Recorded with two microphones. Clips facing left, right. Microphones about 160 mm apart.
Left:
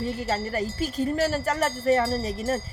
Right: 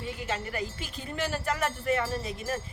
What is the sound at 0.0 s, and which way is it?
Wind chime, 40° left (ahead or behind).